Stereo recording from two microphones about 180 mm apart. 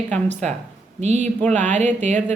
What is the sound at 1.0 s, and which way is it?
A woman's voice, 40° right (ahead or behind).